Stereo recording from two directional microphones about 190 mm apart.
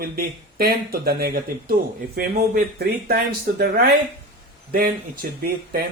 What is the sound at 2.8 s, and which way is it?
Speech, 55° right (ahead or behind).